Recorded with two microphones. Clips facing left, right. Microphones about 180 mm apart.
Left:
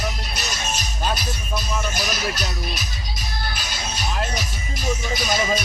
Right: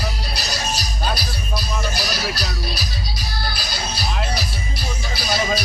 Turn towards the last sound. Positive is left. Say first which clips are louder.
# even
turn(degrees=-35)  # may be behind; listen again after turning